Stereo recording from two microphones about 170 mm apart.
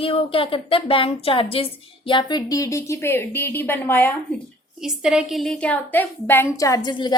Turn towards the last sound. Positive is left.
turn(degrees=25)  # may be behind; listen again after turning